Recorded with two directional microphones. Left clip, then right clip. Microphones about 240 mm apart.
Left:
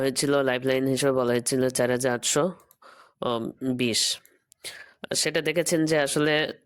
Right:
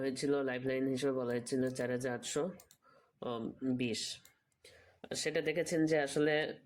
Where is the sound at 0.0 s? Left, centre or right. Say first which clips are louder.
Left 11 dB; left.